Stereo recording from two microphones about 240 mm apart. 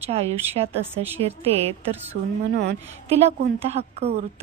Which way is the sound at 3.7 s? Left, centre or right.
Right.